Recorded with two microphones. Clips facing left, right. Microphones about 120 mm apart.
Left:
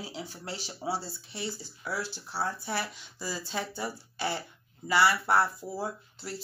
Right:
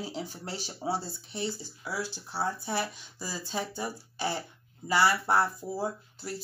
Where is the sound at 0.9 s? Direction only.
20° right (ahead or behind).